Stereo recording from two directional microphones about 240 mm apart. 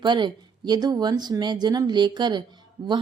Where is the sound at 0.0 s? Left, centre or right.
Centre.